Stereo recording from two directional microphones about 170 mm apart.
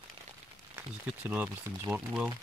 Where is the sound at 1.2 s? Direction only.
10° right (ahead or behind).